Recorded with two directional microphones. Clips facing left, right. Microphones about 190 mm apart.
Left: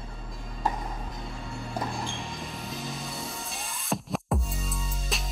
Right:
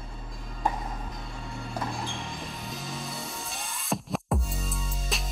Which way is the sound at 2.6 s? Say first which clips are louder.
Left 1 dB; centre (ahead or behind).